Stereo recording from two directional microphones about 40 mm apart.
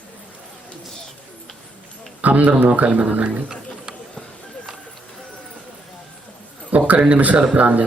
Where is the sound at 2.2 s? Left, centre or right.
Right.